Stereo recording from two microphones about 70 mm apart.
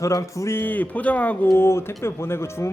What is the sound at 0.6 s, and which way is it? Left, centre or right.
Speech, left.